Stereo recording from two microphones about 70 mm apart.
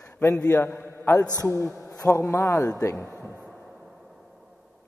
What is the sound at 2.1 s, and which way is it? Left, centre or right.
Speech, left.